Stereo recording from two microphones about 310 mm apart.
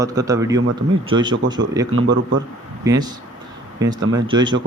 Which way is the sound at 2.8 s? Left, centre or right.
Centre.